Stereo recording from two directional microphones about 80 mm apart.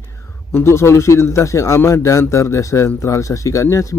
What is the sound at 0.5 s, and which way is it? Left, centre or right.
Speech, left.